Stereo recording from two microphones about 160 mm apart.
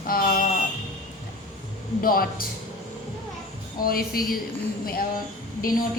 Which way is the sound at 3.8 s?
65° left (ahead or behind).